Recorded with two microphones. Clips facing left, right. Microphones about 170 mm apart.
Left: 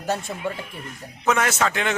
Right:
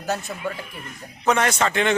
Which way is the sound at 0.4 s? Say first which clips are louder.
Left 1 dB; 25° left (ahead or behind).